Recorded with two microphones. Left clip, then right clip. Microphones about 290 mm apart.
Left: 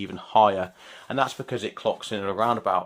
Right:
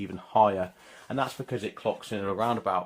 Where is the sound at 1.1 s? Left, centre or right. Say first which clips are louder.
Left 5 dB; left.